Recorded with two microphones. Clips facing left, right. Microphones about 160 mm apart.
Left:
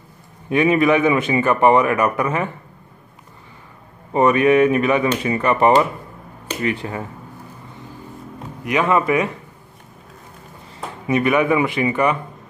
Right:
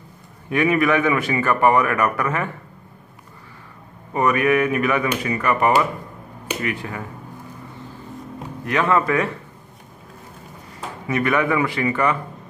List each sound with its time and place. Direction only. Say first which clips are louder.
0.5 s a man's voice: left 3 dB; 20° left (ahead or behind)
4.1 s a man's voice: left 4 dB; 25° left (ahead or behind)
8.6 s speech: left 2 dB; 15° left (ahead or behind)
11.1 s a man's voice: left 3 dB; 20° left (ahead or behind)